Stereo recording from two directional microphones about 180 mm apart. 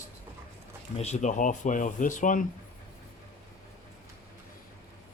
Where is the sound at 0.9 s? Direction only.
35° left (ahead or behind).